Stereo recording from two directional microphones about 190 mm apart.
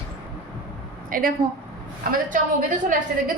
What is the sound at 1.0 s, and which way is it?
A woman's voice, 50° right (ahead or behind).